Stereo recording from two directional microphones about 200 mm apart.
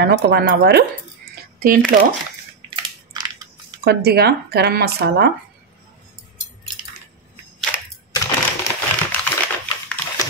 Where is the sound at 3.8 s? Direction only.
50° right (ahead or behind).